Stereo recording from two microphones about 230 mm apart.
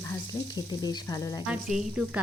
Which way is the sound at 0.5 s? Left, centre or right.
Centre.